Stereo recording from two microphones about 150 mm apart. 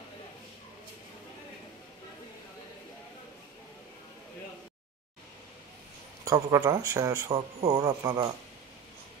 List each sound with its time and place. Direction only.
6.2 s a man's voice: 20° right (ahead or behind)